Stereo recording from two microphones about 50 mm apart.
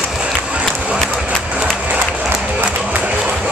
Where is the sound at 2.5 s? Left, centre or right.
Right.